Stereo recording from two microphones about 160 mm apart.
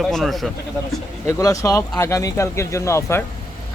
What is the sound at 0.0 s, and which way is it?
Speech, centre (ahead or behind).